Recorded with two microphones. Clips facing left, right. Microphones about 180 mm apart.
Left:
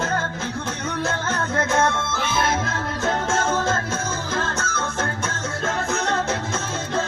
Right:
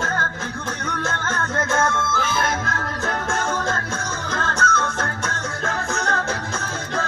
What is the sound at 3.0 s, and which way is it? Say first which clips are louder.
Music: left 3 dB; 25° left (ahead or behind).